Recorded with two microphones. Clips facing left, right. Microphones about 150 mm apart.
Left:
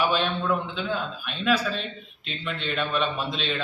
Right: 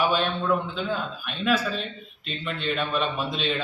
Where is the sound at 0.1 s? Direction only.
Centre (ahead or behind).